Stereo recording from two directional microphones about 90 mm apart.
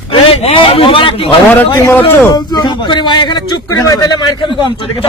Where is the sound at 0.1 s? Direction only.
80° left.